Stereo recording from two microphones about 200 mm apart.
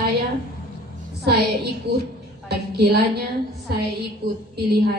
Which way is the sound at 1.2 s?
55° right (ahead or behind).